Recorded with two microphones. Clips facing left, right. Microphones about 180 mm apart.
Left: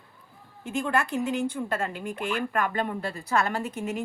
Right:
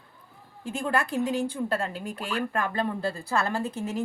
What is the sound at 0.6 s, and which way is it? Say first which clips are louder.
A woman's voice: left 1 dB; 35° right (ahead or behind).